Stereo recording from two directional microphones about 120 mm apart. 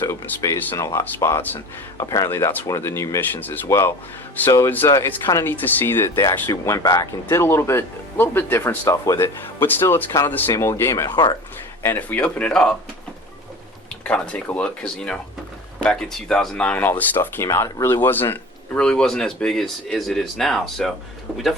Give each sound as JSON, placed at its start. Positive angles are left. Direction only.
{"t": 0.1, "sound": "speech", "side_deg": 25}
{"t": 2.0, "sound": "speech", "side_deg": 25}
{"t": 11.1, "sound": "speech", "side_deg": 40}
{"t": 11.8, "sound": "speech", "side_deg": 15}
{"t": 14.0, "sound": "speech", "side_deg": 10}